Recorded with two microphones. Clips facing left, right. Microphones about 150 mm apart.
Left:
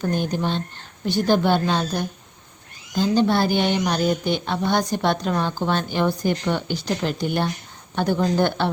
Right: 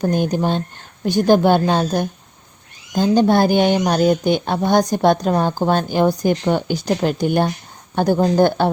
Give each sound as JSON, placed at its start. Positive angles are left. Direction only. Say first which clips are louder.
{"t": 0.2, "sound": "speech", "louder": "right 5 dB", "side_deg": -45}